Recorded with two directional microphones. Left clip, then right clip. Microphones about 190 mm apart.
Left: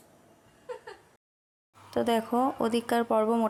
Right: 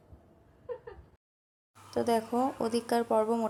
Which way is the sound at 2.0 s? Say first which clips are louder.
Left 2 dB; 20° left (ahead or behind).